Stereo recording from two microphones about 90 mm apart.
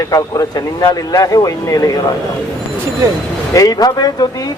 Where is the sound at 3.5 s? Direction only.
45° left (ahead or behind).